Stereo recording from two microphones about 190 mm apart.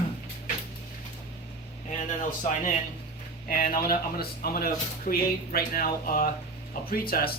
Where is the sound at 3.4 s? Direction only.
45° left (ahead or behind).